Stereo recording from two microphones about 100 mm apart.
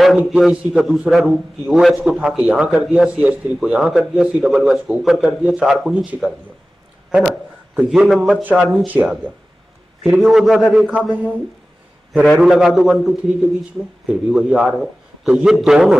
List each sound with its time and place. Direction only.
0.2 s a man's voice: 10° right (ahead or behind)
7.1 s a sound: 5° right (ahead or behind)
7.8 s a man's voice: 15° right (ahead or behind)
10.3 s a man's voice: centre (ahead or behind)
10.7 s a man's voice: 10° right (ahead or behind)
12.1 s a man's voice: centre (ahead or behind)